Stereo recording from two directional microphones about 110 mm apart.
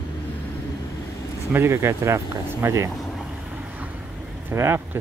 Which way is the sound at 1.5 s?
20° right (ahead or behind).